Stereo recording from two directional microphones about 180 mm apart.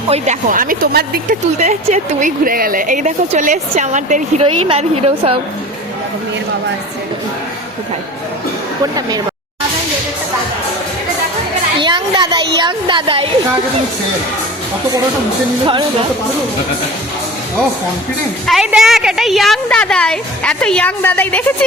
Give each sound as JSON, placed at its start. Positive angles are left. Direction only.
{"t": 0.1, "sound": "a woman's voice", "side_deg": -45}
{"t": 1.5, "sound": "a woman's voice", "side_deg": -40}
{"t": 8.8, "sound": "speech", "side_deg": -20}
{"t": 11.8, "sound": "children playing", "side_deg": -25}
{"t": 12.5, "sound": "speech", "side_deg": -25}
{"t": 18.4, "sound": "a woman's voice", "side_deg": -5}